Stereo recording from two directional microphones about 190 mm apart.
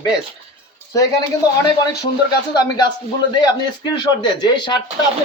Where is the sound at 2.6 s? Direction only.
25° left (ahead or behind).